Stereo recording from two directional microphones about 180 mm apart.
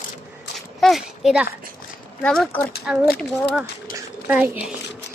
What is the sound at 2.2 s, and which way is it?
Speech, 5° left (ahead or behind).